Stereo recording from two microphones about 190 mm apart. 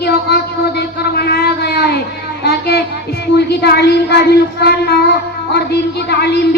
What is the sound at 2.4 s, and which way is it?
Child singing, 55° left (ahead or behind).